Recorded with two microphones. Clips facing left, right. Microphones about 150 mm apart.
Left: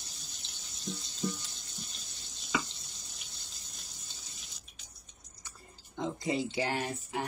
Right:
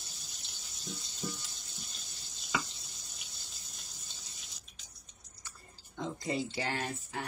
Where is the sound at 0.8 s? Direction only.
Centre (ahead or behind).